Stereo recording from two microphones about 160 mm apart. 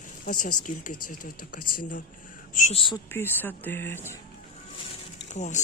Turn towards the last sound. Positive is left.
turn(degrees=50)  # may be behind; listen again after turning